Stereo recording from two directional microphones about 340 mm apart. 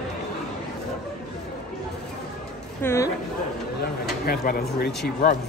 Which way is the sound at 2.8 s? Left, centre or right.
Centre.